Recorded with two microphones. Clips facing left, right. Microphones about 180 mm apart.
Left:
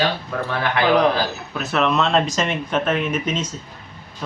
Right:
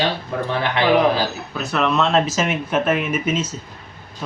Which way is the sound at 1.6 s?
Centre (ahead or behind).